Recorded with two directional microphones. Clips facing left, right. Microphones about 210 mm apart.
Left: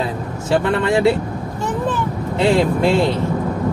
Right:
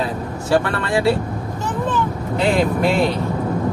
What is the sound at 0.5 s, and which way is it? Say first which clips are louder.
Speech: left 2 dB; 20° left (ahead or behind).